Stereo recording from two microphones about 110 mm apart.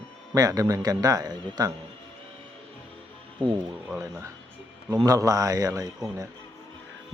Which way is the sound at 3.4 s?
50° right (ahead or behind).